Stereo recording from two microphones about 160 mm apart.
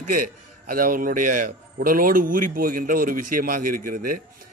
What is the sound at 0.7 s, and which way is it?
Speech, 60° right (ahead or behind).